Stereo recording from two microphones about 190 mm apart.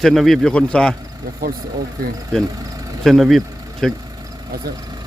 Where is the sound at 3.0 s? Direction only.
Centre (ahead or behind).